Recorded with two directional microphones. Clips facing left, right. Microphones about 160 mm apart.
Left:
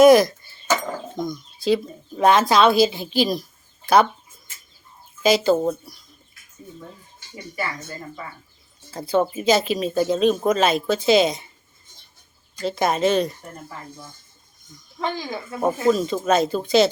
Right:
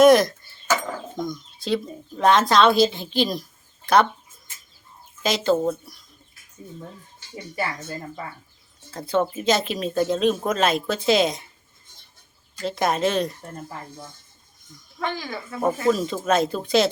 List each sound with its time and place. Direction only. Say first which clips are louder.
0.0 s speech: left 2 dB; centre (ahead or behind)
5.2 s speech: left 3 dB; 5° left (ahead or behind)
8.9 s speech: left 2 dB; 5° left (ahead or behind)
12.6 s speech: left 2 dB; centre (ahead or behind)
14.9 s speech: left 2 dB; 20° left (ahead or behind)
15.6 s speech: left 2 dB; centre (ahead or behind)